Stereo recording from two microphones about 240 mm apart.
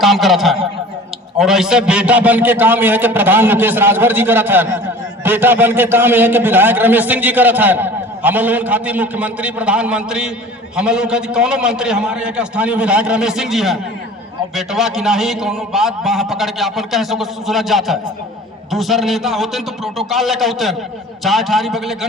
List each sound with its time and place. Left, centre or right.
0.0 s a man's voice: centre